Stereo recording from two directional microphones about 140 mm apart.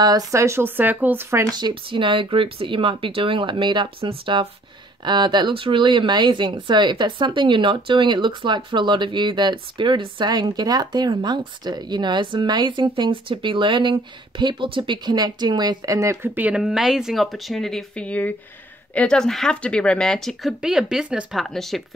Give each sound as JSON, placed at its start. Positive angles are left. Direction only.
{"t": 0.0, "sound": "speech", "side_deg": -25}
{"t": 1.5, "sound": "speech", "side_deg": -35}